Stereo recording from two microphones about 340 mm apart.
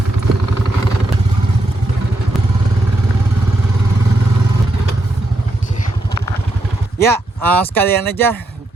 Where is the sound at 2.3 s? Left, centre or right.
Centre.